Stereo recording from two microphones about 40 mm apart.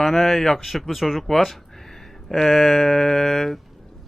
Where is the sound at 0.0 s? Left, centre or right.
Centre.